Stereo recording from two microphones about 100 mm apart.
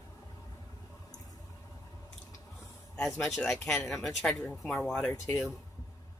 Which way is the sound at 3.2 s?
Centre (ahead or behind).